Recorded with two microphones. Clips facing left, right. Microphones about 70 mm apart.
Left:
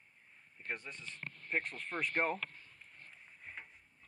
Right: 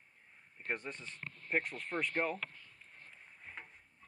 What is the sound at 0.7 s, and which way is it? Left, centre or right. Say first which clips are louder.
Speech: right 3 dB; right.